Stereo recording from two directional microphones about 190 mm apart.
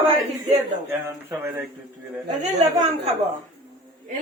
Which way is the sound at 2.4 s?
35° right (ahead or behind).